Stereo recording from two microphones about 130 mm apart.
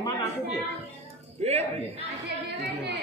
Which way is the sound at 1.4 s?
55° right (ahead or behind).